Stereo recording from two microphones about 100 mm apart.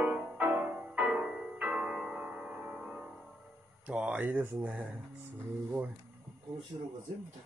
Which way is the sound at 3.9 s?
15° right (ahead or behind).